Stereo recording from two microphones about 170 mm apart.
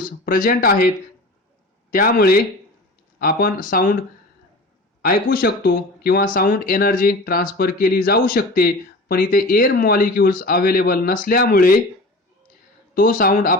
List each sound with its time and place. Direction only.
0.3 s speech: 55° left (ahead or behind)
5.0 s speech: 60° left (ahead or behind)
12.9 s speech: 55° left (ahead or behind)